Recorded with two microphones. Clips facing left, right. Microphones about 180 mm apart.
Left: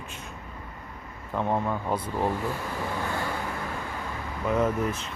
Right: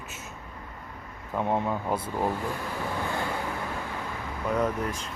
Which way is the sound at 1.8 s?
5° right (ahead or behind).